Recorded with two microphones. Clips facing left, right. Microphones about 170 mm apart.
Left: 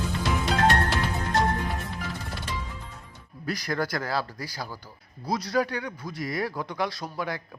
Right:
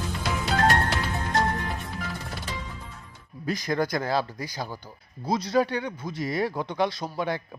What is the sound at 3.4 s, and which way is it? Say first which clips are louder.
Speech: right 3 dB; 20° right (ahead or behind).